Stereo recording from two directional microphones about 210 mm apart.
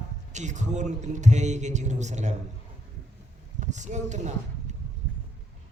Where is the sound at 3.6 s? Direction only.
35° right (ahead or behind).